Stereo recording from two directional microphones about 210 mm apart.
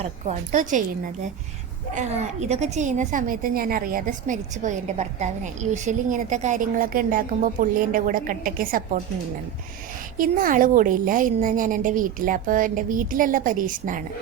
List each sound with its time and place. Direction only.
0.0 s a woman's voice: 35° right (ahead or behind)
2.0 s a woman's voice: 30° right (ahead or behind)
10.2 s a woman's voice: 40° right (ahead or behind)